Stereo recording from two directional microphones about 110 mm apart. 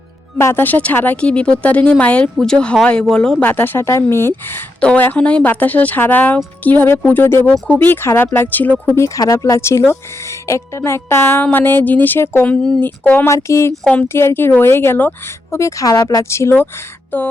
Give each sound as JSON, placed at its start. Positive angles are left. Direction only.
{"t": 0.3, "sound": "speech", "side_deg": 20}
{"t": 3.4, "sound": "speech", "side_deg": 20}
{"t": 9.0, "sound": "speech", "side_deg": 30}
{"t": 13.2, "sound": "speech", "side_deg": 25}
{"t": 15.5, "sound": "speech", "side_deg": 30}